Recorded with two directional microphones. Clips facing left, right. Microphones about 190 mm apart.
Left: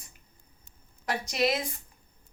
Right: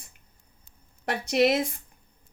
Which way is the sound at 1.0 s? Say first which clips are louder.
Right 5 dB; 60° right (ahead or behind).